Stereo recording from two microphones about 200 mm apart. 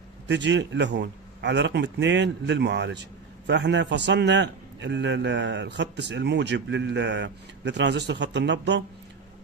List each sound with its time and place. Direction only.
0.3 s a man's voice: 60° right (ahead or behind)